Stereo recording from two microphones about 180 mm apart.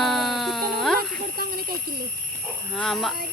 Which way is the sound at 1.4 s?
60° right (ahead or behind).